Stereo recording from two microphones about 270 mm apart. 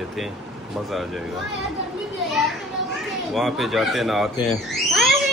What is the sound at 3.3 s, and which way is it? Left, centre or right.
Speech, centre.